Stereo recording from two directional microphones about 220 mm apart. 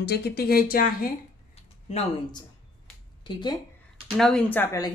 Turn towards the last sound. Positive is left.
turn(degrees=15)  # may be behind; listen again after turning